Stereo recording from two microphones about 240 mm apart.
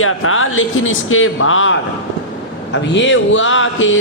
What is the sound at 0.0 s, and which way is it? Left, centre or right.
A man's voice, left.